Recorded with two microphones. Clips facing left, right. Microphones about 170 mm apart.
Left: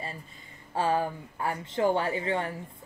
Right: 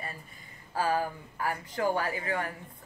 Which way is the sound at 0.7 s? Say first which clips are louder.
Left 2 dB; 25° left (ahead or behind).